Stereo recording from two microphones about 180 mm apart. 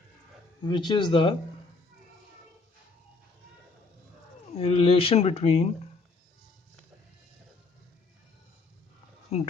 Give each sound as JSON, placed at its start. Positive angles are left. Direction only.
{"t": 0.6, "sound": "speech", "side_deg": 25}
{"t": 4.5, "sound": "speech", "side_deg": 30}
{"t": 9.3, "sound": "speech", "side_deg": 35}